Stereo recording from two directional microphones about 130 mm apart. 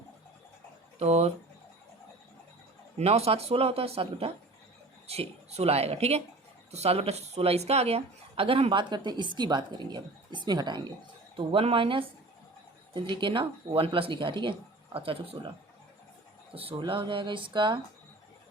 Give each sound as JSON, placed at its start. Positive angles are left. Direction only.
{"t": 0.9, "sound": "speech", "side_deg": -55}
{"t": 3.0, "sound": "a woman's voice", "side_deg": -50}
{"t": 11.3, "sound": "a woman's voice", "side_deg": -45}
{"t": 16.6, "sound": "a woman's voice", "side_deg": -45}